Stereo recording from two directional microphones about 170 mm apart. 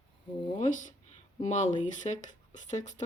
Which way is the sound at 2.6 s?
45° left (ahead or behind).